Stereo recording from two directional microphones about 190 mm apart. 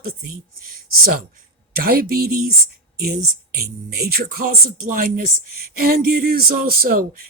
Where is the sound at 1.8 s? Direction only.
55° right (ahead or behind).